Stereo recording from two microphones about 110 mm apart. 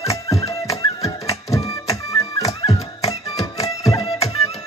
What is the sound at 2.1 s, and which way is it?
Music, 35° left (ahead or behind).